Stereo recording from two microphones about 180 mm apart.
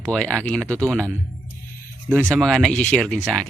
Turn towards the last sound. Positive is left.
turn(degrees=0)  # may be behind; listen again after turning